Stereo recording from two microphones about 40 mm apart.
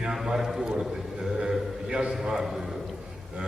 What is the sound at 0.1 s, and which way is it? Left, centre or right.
A man's voice, centre.